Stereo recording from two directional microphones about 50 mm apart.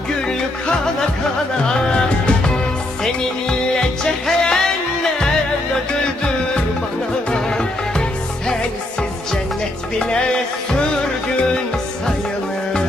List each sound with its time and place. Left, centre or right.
0.3 s music: centre
4.0 s music: centre
7.3 s music: centre
10.0 s music: centre